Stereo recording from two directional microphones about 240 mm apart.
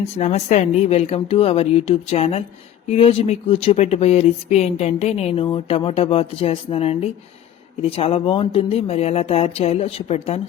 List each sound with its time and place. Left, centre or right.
0.2 s speech: left